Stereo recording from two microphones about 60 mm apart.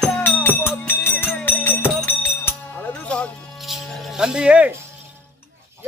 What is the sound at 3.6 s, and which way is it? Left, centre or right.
Music, centre.